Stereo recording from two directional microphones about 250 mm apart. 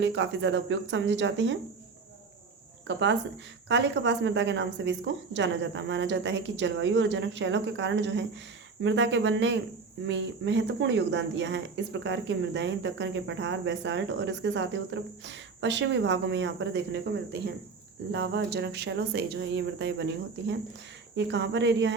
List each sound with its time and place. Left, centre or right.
0.0 s speech: right
2.8 s speech: right